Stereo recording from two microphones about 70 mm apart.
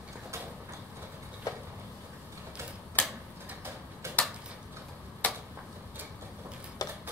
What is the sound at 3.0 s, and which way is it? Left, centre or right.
Tick-tock, left.